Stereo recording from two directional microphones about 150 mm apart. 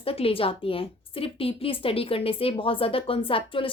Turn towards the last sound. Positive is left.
turn(degrees=35)  # may be behind; listen again after turning